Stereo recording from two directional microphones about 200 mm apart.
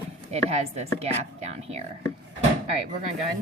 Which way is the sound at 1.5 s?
30° right (ahead or behind).